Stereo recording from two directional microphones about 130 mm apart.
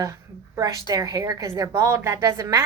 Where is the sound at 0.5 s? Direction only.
30° right (ahead or behind).